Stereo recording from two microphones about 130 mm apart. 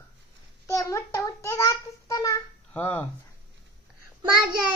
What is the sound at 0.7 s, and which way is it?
Child singing, 25° left (ahead or behind).